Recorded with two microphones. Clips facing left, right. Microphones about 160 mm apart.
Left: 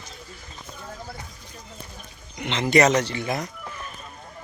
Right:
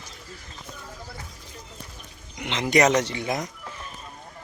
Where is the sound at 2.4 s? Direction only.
10° right (ahead or behind).